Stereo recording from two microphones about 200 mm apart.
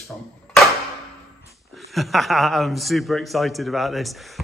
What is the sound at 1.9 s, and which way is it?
Speech, centre (ahead or behind).